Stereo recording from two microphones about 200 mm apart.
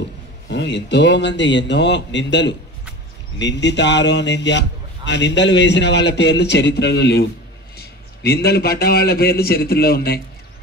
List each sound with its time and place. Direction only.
0.5 s a man's voice: 60° left (ahead or behind)